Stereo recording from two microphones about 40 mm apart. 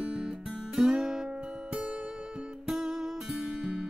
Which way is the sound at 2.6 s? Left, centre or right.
Centre.